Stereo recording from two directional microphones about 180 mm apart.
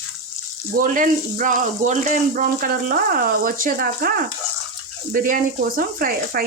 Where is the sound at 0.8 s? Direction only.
45° right (ahead or behind).